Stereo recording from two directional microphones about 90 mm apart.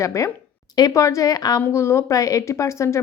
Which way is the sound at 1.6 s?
30° left (ahead or behind).